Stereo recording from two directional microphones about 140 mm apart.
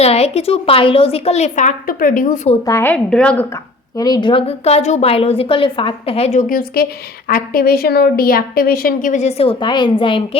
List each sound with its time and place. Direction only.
0.0 s speech: 45° left (ahead or behind)
2.6 s a woman's voice: 15° left (ahead or behind)
3.5 s speech: 25° left (ahead or behind); by 6.4 s 50° left (ahead or behind)
6.5 s a woman's voice: 90° left; by 10.2 s 40° left (ahead or behind)